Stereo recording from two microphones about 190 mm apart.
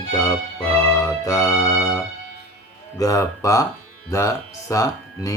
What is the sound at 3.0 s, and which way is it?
Speech, 20° left (ahead or behind).